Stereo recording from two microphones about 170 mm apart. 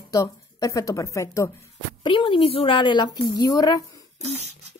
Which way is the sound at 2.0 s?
30° left (ahead or behind).